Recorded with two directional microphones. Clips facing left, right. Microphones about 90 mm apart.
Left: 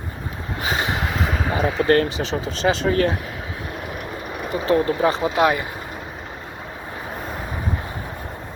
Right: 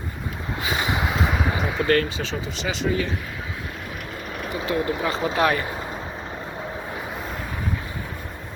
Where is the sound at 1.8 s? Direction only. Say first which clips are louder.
Left 3 dB; 30° left (ahead or behind).